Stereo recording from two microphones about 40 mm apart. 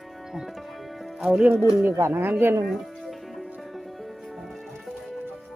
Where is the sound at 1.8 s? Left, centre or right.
Right.